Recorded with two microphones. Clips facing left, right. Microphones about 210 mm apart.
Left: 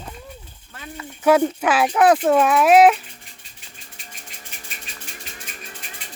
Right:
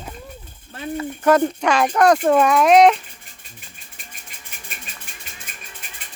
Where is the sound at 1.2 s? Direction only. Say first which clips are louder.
Even; 5° left (ahead or behind).